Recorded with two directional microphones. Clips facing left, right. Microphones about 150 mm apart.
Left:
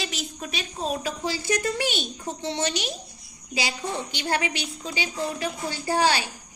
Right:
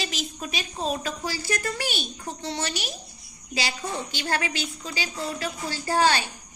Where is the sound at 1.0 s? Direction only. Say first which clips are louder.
Left 2 dB; 20° left (ahead or behind).